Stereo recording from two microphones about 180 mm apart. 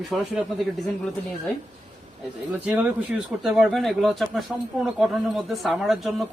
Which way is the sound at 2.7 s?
5° right (ahead or behind).